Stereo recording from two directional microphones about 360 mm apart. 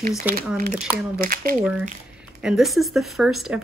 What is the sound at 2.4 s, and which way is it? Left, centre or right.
Speech, centre.